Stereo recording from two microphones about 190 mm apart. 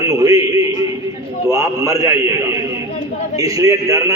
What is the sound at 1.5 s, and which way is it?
A man's voice, 15° right (ahead or behind).